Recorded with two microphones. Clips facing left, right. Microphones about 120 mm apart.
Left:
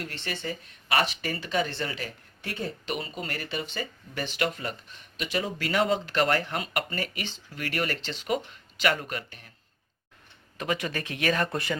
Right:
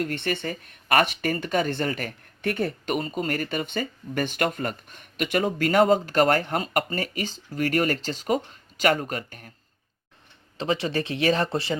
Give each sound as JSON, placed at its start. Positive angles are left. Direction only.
{"t": 0.0, "sound": "speech", "side_deg": -50}
{"t": 10.6, "sound": "speech", "side_deg": -30}